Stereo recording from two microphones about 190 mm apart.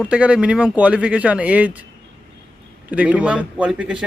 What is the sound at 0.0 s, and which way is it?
Speech, 5° right (ahead or behind).